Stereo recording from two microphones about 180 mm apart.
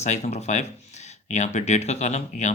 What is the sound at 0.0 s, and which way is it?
Speech, 40° left (ahead or behind).